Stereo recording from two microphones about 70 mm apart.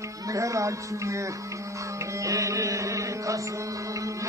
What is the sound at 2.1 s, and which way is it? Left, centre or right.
Music, right.